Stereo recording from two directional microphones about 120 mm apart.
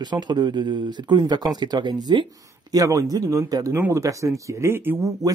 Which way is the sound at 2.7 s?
30° right (ahead or behind).